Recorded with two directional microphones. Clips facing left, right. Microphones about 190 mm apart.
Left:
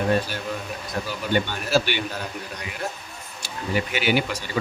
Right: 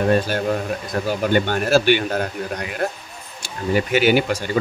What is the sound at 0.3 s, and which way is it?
Speech, 55° right (ahead or behind).